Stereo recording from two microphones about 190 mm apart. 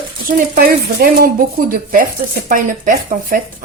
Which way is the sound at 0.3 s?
50° right (ahead or behind).